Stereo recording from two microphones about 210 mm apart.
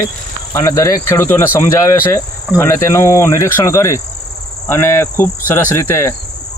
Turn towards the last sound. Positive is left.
turn(degrees=10)  # may be behind; listen again after turning